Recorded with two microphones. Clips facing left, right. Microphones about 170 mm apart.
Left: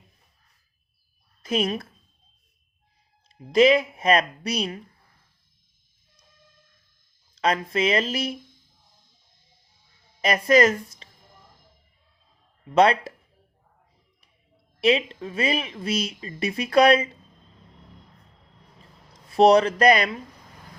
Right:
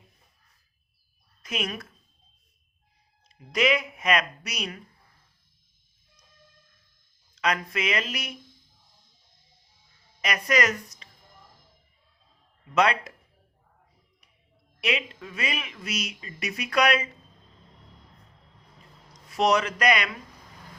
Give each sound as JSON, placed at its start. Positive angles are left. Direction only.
{"t": 1.4, "sound": "a woman's voice", "side_deg": 30}
{"t": 3.2, "sound": "speech", "side_deg": 30}
{"t": 7.3, "sound": "speech", "side_deg": 30}
{"t": 10.2, "sound": "speech", "side_deg": 30}
{"t": 12.7, "sound": "speech", "side_deg": 30}
{"t": 14.8, "sound": "speech", "side_deg": 30}
{"t": 19.3, "sound": "speech", "side_deg": 30}